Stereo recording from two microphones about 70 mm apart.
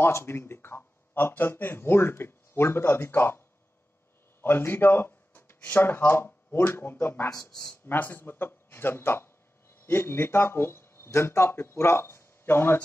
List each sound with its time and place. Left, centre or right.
0.0 s speech: left
4.4 s a sound: left
5.6 s speech: left